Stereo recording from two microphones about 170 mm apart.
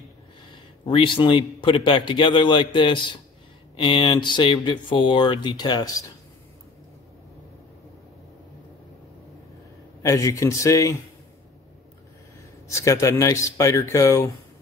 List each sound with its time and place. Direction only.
0.8 s a man's voice: 30° left (ahead or behind)
10.0 s a man's voice: 20° left (ahead or behind)
12.6 s speech: 15° left (ahead or behind)